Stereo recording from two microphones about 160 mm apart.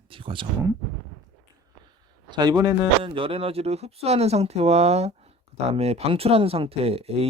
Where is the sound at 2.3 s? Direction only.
25° right (ahead or behind).